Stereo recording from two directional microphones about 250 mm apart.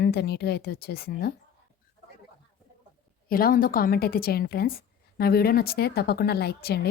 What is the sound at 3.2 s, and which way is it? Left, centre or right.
A woman's voice, left.